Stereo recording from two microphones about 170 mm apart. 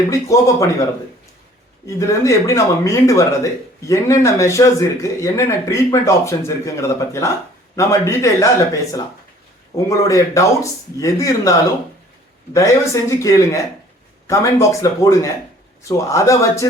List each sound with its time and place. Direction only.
0.1 s speech: 20° left (ahead or behind)
1.9 s speech: 20° left (ahead or behind)
12.5 s speech: 20° left (ahead or behind)
14.8 s speech: 20° left (ahead or behind)